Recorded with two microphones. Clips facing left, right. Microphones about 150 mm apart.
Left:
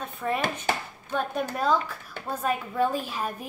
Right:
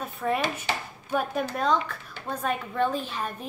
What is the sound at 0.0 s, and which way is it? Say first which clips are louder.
Chopping: right 2 dB; centre (ahead or behind).